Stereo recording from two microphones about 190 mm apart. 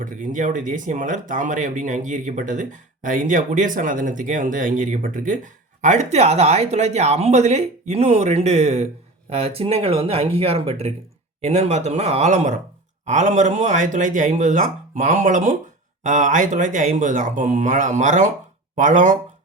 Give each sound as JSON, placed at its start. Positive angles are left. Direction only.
{"t": 0.0, "sound": "speech", "side_deg": -45}